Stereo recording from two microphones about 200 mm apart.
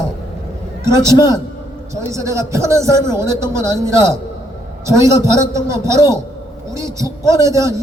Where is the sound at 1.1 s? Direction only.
20° left (ahead or behind).